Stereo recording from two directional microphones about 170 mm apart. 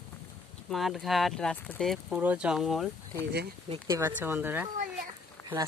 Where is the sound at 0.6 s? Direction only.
Centre (ahead or behind).